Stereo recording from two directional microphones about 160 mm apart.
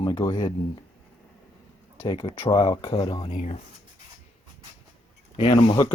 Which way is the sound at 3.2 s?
45° left (ahead or behind).